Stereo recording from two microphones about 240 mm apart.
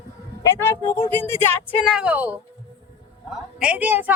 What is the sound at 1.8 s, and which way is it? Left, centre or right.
Speech, centre.